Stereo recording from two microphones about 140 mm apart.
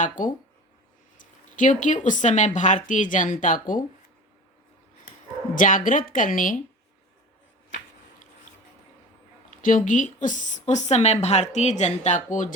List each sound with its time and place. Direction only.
1.2 s a woman's voice: 65° left (ahead or behind)
5.5 s a woman's voice: 70° left (ahead or behind)
9.5 s a woman's voice: 75° left (ahead or behind)